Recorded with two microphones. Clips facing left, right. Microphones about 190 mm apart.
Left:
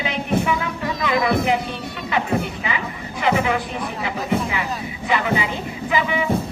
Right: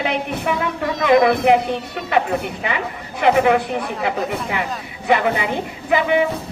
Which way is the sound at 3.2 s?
55° right (ahead or behind).